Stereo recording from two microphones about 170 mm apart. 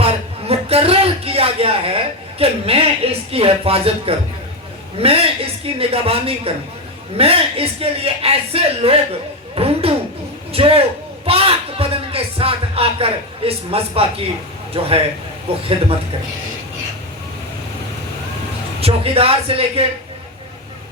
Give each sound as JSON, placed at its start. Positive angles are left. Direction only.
{"t": 0.0, "sound": "a sound", "side_deg": -35}
{"t": 4.9, "sound": "a man's voice", "side_deg": -35}
{"t": 18.8, "sound": "a man's voice", "side_deg": -35}